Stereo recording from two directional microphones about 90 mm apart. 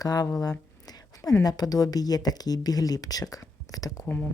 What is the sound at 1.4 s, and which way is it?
Speech, 45° left (ahead or behind).